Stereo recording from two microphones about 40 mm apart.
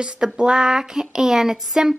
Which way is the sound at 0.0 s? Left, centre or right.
Centre.